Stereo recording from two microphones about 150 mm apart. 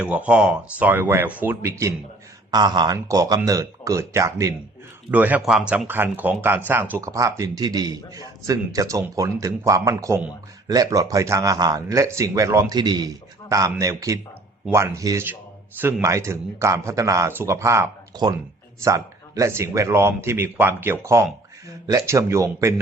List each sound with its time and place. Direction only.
0.0 s a man's voice: 10° right (ahead or behind)